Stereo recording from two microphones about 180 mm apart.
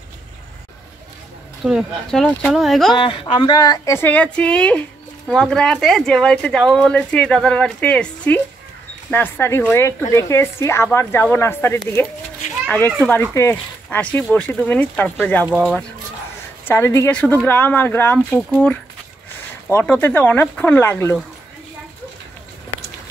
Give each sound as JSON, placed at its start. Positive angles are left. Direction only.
{"t": 1.7, "sound": "speech", "side_deg": 0}
{"t": 3.0, "sound": "a child's voice", "side_deg": 30}
{"t": 15.4, "sound": "speech", "side_deg": 0}
{"t": 16.6, "sound": "speech", "side_deg": 15}
{"t": 19.7, "sound": "speech", "side_deg": 10}